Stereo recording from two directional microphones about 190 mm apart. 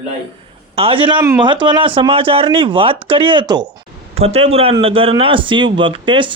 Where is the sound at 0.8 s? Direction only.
30° right (ahead or behind).